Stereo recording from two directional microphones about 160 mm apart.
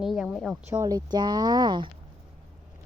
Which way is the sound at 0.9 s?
25° right (ahead or behind).